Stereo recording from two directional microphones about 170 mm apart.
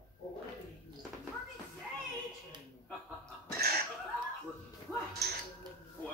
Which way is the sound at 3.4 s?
65° right (ahead or behind).